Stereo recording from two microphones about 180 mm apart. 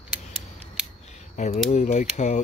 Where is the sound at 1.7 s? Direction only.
40° left (ahead or behind).